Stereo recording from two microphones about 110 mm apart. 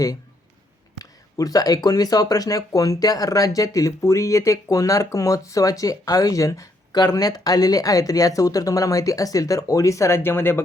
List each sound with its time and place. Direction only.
0.9 s speech: 35° left (ahead or behind)